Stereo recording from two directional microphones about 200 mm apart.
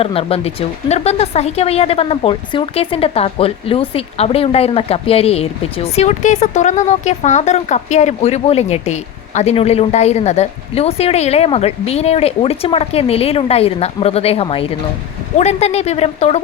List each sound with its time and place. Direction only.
0.0 s speech: 30° left (ahead or behind)